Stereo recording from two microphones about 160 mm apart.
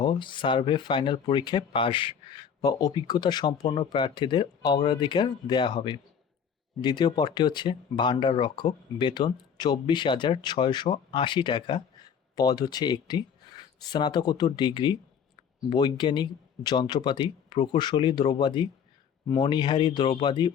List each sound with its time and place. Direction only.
0.0 s speech: 30° left (ahead or behind)